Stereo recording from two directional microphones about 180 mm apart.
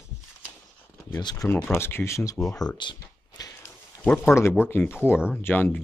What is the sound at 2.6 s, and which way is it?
Speech, 25° left (ahead or behind).